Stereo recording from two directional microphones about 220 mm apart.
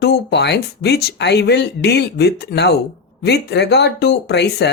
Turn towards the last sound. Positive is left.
turn(degrees=50)  # may be behind; listen again after turning